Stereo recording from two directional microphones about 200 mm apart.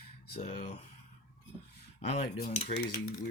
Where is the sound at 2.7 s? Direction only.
55° left (ahead or behind).